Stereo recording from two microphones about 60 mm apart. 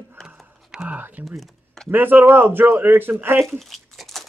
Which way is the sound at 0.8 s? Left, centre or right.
Right.